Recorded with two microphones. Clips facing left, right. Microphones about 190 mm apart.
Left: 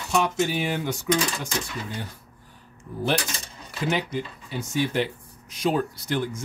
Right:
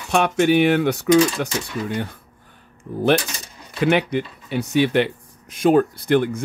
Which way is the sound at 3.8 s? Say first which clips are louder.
Right 8 dB; 65° right (ahead or behind).